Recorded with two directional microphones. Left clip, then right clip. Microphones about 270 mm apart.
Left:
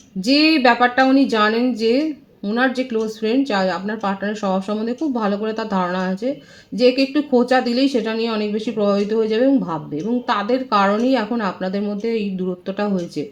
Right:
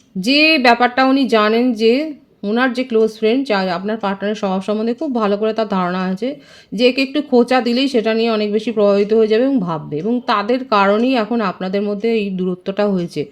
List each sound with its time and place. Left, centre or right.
0.2 s a woman's voice: right